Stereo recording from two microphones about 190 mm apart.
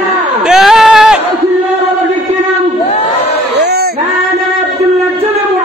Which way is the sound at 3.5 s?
60° right (ahead or behind).